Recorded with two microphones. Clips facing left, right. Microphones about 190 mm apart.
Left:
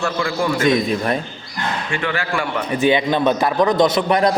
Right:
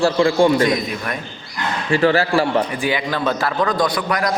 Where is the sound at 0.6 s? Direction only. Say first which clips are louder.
Left 2 dB; 25° left (ahead or behind).